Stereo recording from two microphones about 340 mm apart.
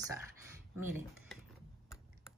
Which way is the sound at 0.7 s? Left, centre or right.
Centre.